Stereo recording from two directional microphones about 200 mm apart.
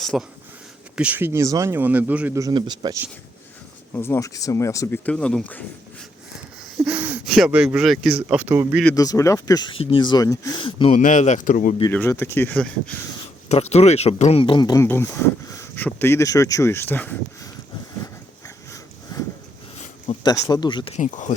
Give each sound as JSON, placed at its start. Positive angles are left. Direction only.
{"t": 0.0, "sound": "speech", "side_deg": 0}
{"t": 3.9, "sound": "speech", "side_deg": 10}
{"t": 6.8, "sound": "speech", "side_deg": -10}
{"t": 9.0, "sound": "speech", "side_deg": 15}
{"t": 10.9, "sound": "speech", "side_deg": 40}
{"t": 11.9, "sound": "speech", "side_deg": 10}
{"t": 13.5, "sound": "speech", "side_deg": 30}
{"t": 18.0, "sound": "a sound", "side_deg": 15}
{"t": 20.2, "sound": "speech", "side_deg": 20}
{"t": 21.0, "sound": "speech", "side_deg": 40}